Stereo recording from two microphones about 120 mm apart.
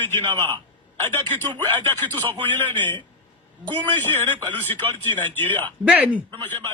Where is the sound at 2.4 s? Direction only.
15° left (ahead or behind).